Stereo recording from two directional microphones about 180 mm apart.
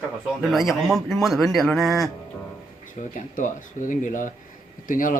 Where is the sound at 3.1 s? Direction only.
45° left (ahead or behind).